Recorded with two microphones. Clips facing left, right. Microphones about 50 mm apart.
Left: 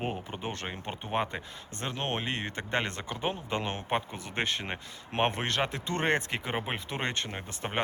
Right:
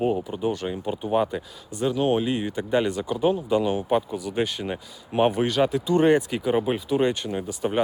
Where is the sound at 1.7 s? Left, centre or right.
Left.